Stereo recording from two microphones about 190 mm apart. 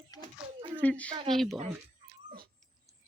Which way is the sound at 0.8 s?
10° left (ahead or behind).